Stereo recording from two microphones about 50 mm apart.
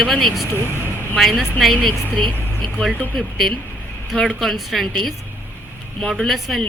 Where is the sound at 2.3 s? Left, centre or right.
Left.